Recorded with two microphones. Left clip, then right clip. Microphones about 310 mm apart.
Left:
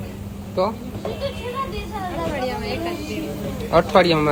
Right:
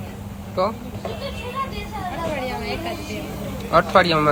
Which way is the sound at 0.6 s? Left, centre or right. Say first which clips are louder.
Even; right.